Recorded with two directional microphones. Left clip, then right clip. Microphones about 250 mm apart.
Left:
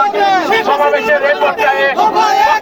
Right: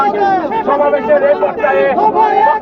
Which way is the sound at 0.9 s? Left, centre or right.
Centre.